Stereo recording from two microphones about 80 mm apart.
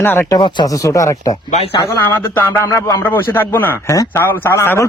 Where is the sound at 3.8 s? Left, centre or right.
Left.